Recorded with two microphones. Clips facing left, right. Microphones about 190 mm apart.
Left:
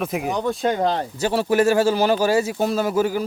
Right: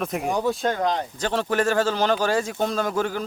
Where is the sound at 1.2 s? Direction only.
10° left (ahead or behind).